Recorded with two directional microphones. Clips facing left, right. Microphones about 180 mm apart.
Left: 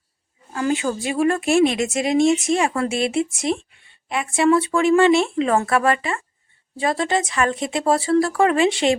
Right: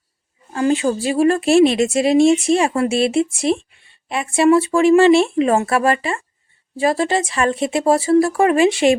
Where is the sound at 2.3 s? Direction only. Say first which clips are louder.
Right 4 dB; 30° right (ahead or behind).